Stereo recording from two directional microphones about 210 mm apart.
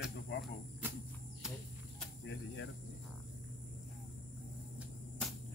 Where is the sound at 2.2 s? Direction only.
55° left (ahead or behind).